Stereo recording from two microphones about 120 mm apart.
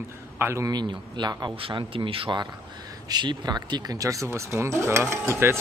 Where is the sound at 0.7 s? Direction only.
35° right (ahead or behind).